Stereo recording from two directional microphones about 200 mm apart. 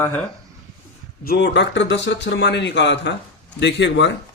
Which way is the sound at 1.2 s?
50° left (ahead or behind).